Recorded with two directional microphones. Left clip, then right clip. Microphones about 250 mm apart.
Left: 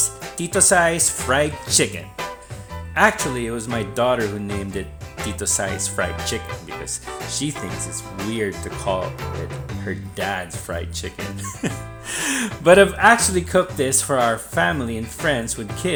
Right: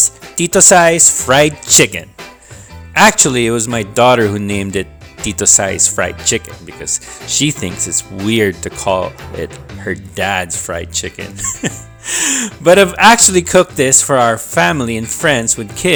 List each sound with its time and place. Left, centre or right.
0.0 s speech: right
13.0 s speech: right